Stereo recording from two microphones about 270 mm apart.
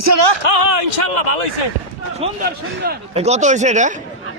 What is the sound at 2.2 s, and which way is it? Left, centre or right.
Speech, right.